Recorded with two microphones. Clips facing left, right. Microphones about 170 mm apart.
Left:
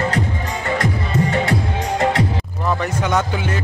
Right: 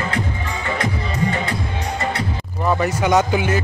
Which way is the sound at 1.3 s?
85° left.